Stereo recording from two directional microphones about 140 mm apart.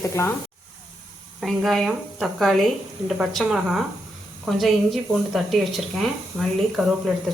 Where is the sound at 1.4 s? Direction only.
Centre (ahead or behind).